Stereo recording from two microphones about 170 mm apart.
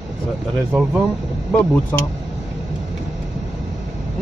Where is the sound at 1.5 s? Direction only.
10° left (ahead or behind).